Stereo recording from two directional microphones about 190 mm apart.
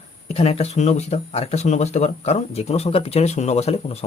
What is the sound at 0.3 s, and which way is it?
Speech, 35° left (ahead or behind).